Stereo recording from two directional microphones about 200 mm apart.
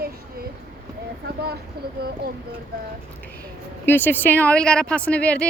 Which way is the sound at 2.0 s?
50° right (ahead or behind).